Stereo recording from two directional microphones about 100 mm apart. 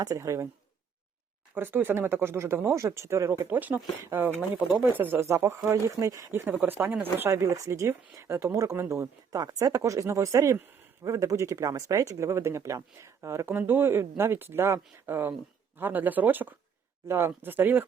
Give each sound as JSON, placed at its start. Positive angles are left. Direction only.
{"t": 0.0, "sound": "speech", "side_deg": -35}
{"t": 1.5, "sound": "speech", "side_deg": -20}
{"t": 6.5, "sound": "speech", "side_deg": -15}